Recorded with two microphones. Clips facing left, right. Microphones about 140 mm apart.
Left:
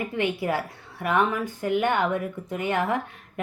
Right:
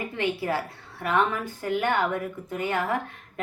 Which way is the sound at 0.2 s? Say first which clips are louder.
Left 1 dB; 15° left (ahead or behind).